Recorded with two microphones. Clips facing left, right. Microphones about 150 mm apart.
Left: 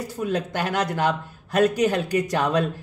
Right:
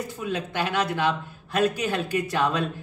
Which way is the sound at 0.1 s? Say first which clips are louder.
Left 4 dB; 40° left (ahead or behind).